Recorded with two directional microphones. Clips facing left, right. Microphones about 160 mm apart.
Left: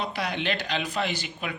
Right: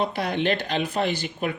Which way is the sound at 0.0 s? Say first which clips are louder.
Right 5 dB; 50° right (ahead or behind).